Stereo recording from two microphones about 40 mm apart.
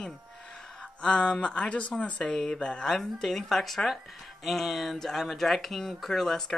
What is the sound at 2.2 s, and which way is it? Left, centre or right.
Speech, centre.